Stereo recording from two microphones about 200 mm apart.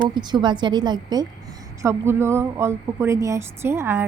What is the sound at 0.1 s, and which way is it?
A woman's voice, 20° right (ahead or behind).